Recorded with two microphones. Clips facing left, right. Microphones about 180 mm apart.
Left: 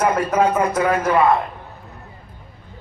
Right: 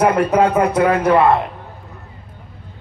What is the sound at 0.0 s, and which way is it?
Speech, 60° right (ahead or behind).